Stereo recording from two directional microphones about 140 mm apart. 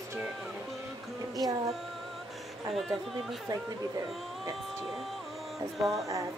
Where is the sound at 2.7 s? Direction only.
Centre (ahead or behind).